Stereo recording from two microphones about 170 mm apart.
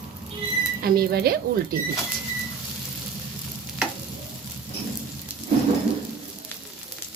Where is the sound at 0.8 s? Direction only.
65° right (ahead or behind).